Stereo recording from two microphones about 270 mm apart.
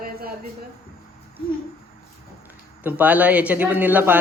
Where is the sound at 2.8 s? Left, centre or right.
Centre.